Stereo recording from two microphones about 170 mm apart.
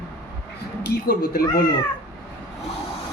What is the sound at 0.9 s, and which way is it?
Speech, 65° left (ahead or behind).